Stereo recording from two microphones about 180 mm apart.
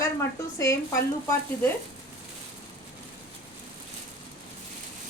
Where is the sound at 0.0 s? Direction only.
15° left (ahead or behind).